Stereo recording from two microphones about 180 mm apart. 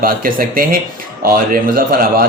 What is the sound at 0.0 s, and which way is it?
Speech, 55° right (ahead or behind).